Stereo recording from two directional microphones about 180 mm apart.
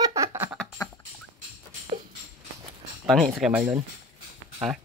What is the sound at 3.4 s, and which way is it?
Speech, 10° right (ahead or behind).